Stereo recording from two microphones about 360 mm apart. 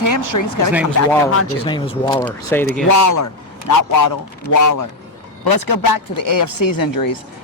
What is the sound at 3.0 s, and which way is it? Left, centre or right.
Speech, left.